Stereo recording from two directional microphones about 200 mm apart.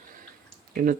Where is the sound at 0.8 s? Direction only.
45° right (ahead or behind).